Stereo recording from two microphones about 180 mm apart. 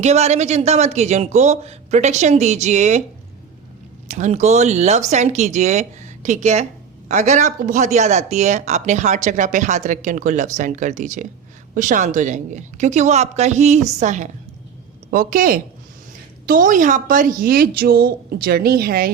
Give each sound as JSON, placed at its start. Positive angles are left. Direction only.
{"t": 0.0, "sound": "speech", "side_deg": -40}
{"t": 4.1, "sound": "a woman's voice", "side_deg": -40}